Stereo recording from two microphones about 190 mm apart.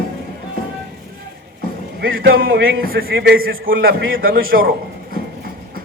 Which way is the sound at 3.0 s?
75° right (ahead or behind).